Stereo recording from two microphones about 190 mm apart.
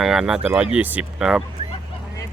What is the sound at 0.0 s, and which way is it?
Speech, 5° right (ahead or behind).